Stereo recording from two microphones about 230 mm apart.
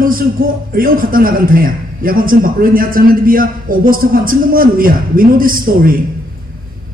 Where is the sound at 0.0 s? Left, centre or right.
Right.